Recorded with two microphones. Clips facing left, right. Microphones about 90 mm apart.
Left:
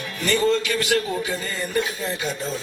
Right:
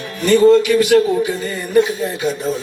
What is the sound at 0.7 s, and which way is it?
Speech, 20° right (ahead or behind).